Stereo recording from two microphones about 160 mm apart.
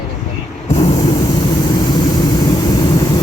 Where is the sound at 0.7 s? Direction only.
45° left (ahead or behind).